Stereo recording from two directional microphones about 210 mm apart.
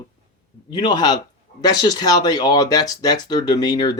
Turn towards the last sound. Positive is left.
turn(degrees=20)  # may be behind; listen again after turning